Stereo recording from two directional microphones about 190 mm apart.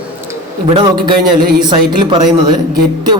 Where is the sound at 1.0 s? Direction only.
25° right (ahead or behind).